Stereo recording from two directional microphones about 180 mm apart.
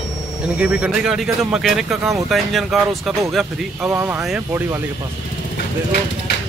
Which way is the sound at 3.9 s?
10° right (ahead or behind).